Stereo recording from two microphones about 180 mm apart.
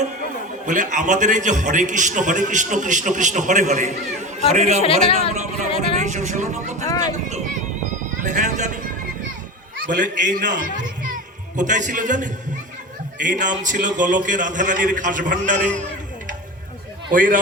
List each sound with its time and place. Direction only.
0.6 s a man's voice: 45° right (ahead or behind)
4.8 s speech: 30° left (ahead or behind)
6.0 s a man's voice: 40° right (ahead or behind)
9.7 s a man's voice: 55° right (ahead or behind)
11.5 s a man's voice: 45° right (ahead or behind)
17.1 s a man's voice: 50° right (ahead or behind)